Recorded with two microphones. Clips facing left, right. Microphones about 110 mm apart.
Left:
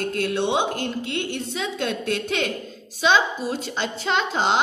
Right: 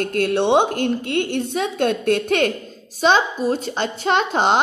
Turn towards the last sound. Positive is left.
turn(degrees=-50)  # may be behind; listen again after turning